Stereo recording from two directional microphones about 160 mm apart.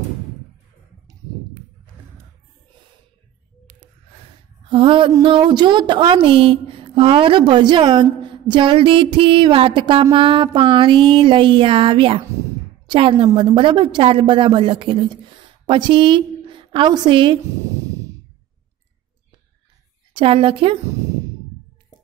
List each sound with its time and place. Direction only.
4.6 s mantra: 30° right (ahead or behind)
5.1 s a woman's voice: 30° right (ahead or behind)
20.2 s a woman's voice: 30° right (ahead or behind)